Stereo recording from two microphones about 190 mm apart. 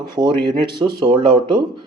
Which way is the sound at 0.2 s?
25° right (ahead or behind).